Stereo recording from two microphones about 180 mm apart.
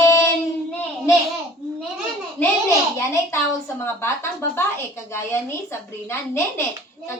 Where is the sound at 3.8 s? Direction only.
15° left (ahead or behind).